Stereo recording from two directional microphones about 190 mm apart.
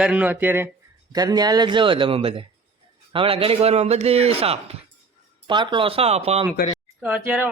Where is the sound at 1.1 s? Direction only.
20° right (ahead or behind).